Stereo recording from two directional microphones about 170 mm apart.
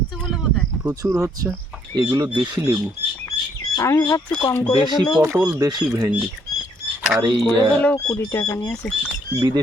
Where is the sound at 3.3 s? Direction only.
25° left (ahead or behind).